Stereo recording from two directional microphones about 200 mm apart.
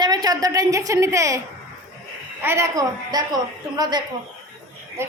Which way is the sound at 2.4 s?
15° right (ahead or behind).